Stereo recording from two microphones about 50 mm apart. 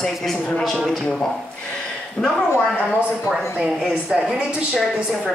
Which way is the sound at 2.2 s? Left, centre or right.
Left.